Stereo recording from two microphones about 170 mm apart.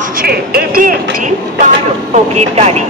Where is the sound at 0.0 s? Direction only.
60° right (ahead or behind).